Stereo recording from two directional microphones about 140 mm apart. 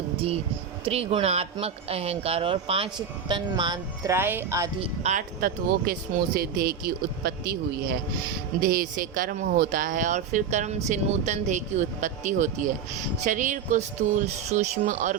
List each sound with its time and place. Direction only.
0.9 s speech: 45° right (ahead or behind); by 4.1 s 30° right (ahead or behind)
4.1 s speech: 15° right (ahead or behind)
4.8 s speech: 50° right (ahead or behind)
5.4 s speech: 90° right
8.6 s speech: 90° right; by 15.1 s 65° right (ahead or behind)